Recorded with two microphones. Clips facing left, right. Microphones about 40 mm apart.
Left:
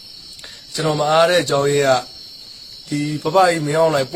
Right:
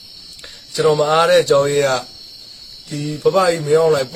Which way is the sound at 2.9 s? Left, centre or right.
Left.